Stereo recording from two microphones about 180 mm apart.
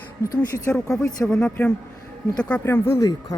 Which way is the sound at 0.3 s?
15° left (ahead or behind).